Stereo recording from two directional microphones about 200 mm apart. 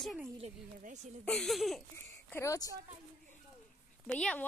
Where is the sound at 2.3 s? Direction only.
15° left (ahead or behind).